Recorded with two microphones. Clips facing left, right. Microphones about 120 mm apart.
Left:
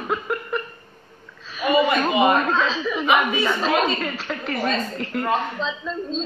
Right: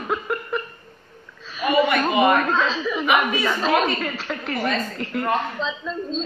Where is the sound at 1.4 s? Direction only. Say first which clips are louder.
Even; centre (ahead or behind).